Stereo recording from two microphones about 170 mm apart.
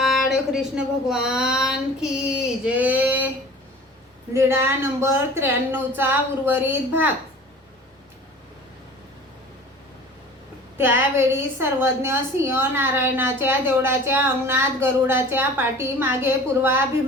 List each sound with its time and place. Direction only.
0.0 s a sound: 5° right (ahead or behind)
4.4 s a woman's voice: 15° right (ahead or behind)
10.8 s a woman's voice: 15° right (ahead or behind)